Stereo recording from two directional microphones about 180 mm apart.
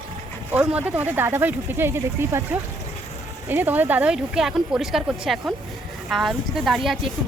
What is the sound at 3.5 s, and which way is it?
Speech, 10° right (ahead or behind).